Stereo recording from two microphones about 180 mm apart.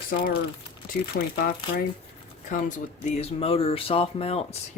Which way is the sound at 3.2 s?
35° left (ahead or behind).